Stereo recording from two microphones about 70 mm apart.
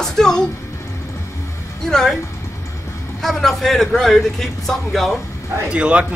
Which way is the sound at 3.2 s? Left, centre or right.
Centre.